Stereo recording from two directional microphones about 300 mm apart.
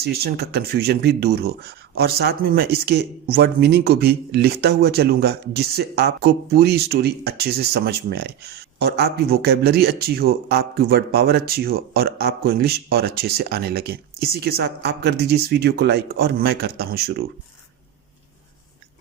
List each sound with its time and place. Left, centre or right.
0.0 s speech: right